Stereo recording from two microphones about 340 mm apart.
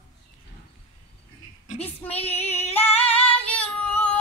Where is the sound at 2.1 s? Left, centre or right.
Centre.